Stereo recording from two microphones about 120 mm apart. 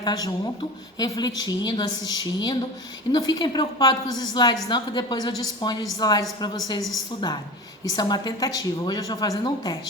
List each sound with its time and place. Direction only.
0.0 s a woman's voice: 35° left (ahead or behind)
7.9 s a woman's voice: 35° left (ahead or behind)